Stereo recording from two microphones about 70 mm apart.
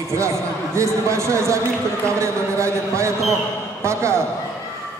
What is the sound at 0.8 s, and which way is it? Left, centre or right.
A man's voice, right.